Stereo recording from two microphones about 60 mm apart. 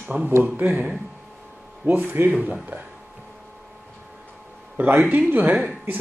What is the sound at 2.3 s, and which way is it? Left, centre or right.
Speech, centre.